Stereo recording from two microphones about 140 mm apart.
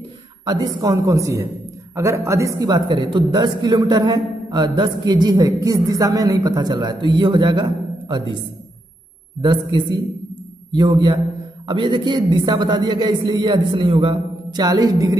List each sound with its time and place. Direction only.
0.5 s a man's voice: 30° right (ahead or behind)
9.4 s speech: 35° right (ahead or behind)